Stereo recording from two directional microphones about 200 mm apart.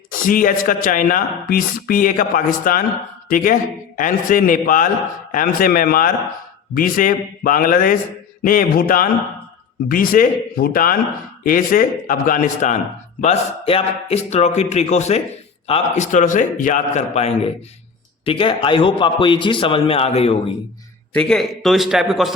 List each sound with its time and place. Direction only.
0.1 s speech: 45° left (ahead or behind)
13.2 s a man's voice: 30° left (ahead or behind)
21.1 s a man's voice: 5° left (ahead or behind)